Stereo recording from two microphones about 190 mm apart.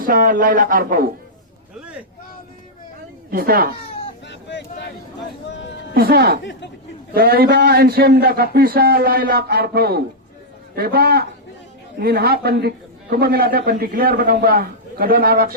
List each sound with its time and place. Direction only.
0.0 s a man's voice: 50° right (ahead or behind)
3.3 s a man's voice: 50° right (ahead or behind)
4.3 s a sound: 70° left (ahead or behind)
5.9 s a man's voice: 55° right (ahead or behind)
6.4 s speech: 65° left (ahead or behind)
7.1 s a man's voice: 55° right (ahead or behind)